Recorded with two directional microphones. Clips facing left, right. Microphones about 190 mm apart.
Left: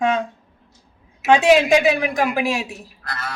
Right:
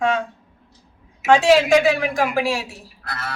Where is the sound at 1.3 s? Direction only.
15° left (ahead or behind).